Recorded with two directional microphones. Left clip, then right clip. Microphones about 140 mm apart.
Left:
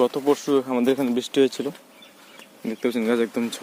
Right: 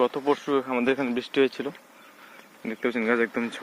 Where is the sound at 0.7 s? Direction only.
35° left (ahead or behind).